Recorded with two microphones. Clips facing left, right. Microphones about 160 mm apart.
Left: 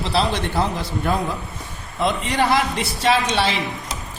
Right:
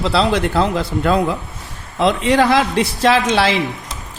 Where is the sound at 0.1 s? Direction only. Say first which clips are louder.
Right 3 dB; 90° right.